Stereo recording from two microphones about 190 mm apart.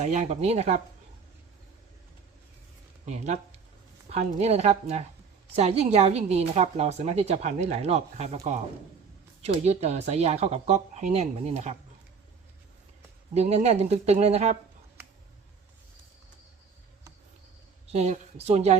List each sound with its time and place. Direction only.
0.0 s a woman's voice: 35° right (ahead or behind)
3.1 s a woman's voice: 35° right (ahead or behind)
13.3 s a woman's voice: 35° right (ahead or behind)
17.8 s a woman's voice: 35° right (ahead or behind)